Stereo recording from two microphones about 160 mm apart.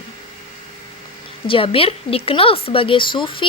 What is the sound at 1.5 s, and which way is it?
Speech, 35° left (ahead or behind).